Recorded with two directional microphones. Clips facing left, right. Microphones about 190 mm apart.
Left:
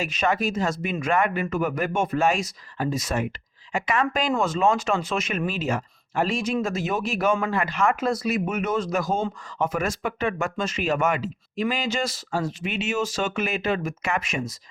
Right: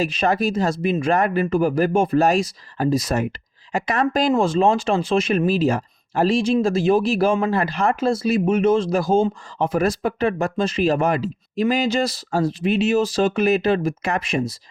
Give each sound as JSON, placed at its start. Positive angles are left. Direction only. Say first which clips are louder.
{"t": 0.0, "sound": "speech", "louder": "right 4 dB", "side_deg": -35}